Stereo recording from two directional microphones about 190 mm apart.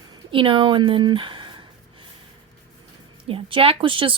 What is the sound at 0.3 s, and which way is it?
A woman's voice, 25° right (ahead or behind).